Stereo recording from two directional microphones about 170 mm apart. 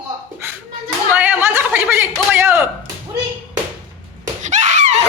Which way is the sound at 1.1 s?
10° right (ahead or behind).